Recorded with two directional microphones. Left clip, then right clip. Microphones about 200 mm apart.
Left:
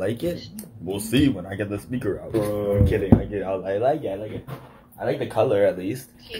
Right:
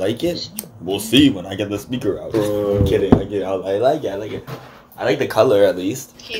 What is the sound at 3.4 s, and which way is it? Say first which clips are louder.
Speech: right 5 dB; 35° right (ahead or behind).